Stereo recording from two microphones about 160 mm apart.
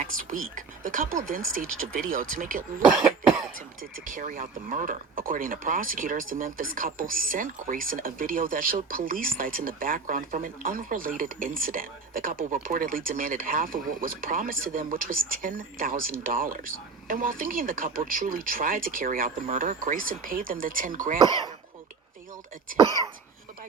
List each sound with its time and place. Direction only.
0.0 s speech: 60° right (ahead or behind)
4.1 s speech: 60° right (ahead or behind)